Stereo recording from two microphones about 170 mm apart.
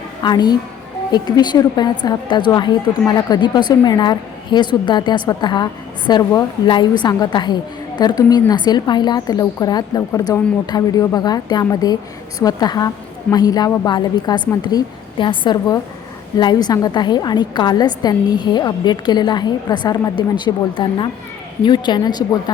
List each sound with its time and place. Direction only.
0.2 s a woman's voice: 25° left (ahead or behind)